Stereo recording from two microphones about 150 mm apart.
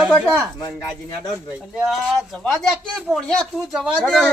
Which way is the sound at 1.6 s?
5° right (ahead or behind).